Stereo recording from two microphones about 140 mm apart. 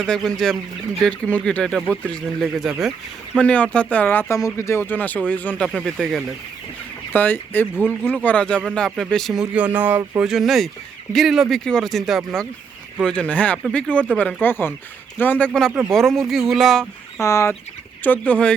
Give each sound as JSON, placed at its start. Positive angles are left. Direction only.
{"t": 0.3, "sound": "speech", "side_deg": 5}
{"t": 7.1, "sound": "speech", "side_deg": 15}
{"t": 17.2, "sound": "speech", "side_deg": 20}